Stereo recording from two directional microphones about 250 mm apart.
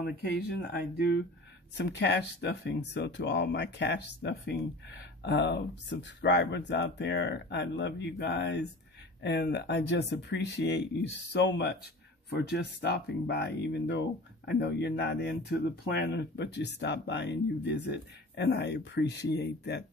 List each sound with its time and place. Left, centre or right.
0.7 s speech: left